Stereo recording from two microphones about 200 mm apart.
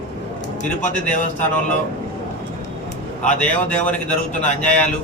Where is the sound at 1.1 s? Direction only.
40° left (ahead or behind).